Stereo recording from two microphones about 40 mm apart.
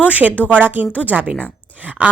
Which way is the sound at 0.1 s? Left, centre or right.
Right.